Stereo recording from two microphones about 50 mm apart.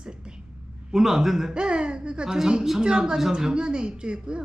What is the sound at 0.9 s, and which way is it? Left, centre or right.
Speech, centre.